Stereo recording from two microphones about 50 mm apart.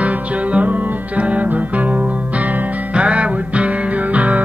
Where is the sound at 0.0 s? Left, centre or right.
Right.